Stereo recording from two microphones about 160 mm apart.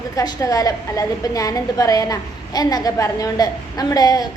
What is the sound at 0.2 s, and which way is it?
A woman's voice, 20° left (ahead or behind).